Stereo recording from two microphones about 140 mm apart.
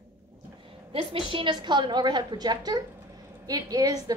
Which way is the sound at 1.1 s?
40° right (ahead or behind).